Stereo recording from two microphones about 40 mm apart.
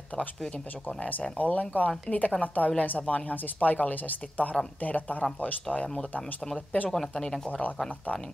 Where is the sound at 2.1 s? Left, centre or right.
Centre.